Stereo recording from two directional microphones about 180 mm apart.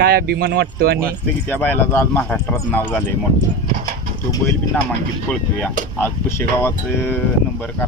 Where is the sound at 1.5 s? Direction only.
10° left (ahead or behind).